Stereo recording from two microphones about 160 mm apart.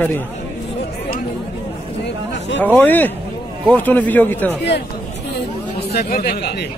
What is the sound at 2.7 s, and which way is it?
A man's voice, 10° left (ahead or behind).